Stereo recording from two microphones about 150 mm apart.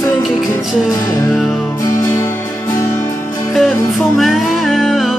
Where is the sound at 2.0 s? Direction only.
20° left (ahead or behind).